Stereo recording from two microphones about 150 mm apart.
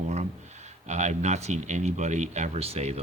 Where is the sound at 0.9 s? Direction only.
50° right (ahead or behind).